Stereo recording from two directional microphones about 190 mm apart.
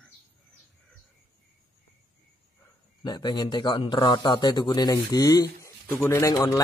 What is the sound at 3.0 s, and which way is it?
A man's voice, 25° left (ahead or behind).